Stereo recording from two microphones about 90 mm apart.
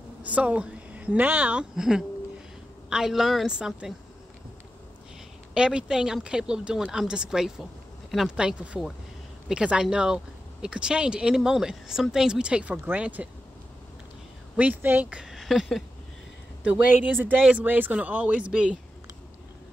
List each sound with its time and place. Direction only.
0.2 s a woman's voice: 15° right (ahead or behind)
5.5 s speech: 10° right (ahead or behind)
14.6 s speech: 20° right (ahead or behind); by 15.8 s centre (ahead or behind)
16.6 s a woman's voice: 20° right (ahead or behind)